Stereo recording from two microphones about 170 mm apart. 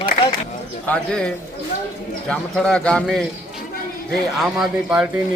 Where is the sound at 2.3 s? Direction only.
5° left (ahead or behind).